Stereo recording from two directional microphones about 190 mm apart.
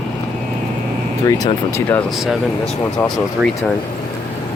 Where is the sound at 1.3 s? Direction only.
15° left (ahead or behind).